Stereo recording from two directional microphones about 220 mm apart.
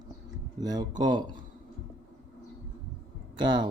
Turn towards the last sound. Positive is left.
turn(degrees=-20)  # may be behind; listen again after turning